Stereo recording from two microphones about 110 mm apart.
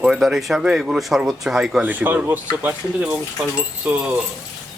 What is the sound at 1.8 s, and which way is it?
Speech, 15° right (ahead or behind).